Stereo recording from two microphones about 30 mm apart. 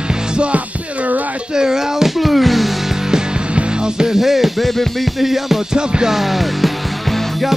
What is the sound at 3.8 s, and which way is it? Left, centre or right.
Music, right.